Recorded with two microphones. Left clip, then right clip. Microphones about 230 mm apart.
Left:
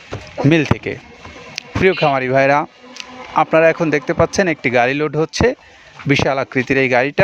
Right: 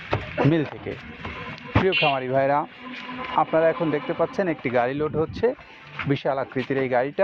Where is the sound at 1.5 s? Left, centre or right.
Left.